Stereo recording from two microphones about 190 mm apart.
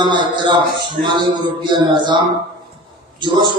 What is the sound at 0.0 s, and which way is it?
Speech, 25° right (ahead or behind).